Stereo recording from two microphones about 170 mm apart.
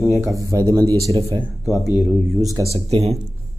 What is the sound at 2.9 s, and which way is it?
Speech, 40° right (ahead or behind).